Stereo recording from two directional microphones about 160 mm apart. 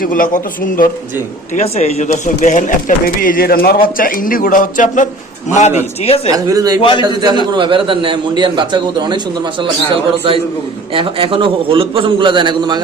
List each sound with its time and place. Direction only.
0.0 s speech: 60° left (ahead or behind)
1.5 s a man's voice: 40° left (ahead or behind)
6.3 s a man's voice: 20° right (ahead or behind)